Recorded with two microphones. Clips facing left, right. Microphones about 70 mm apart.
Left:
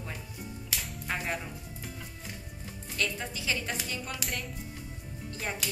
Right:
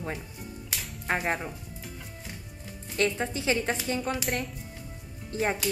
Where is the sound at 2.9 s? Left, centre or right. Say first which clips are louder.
Right 7 dB; right.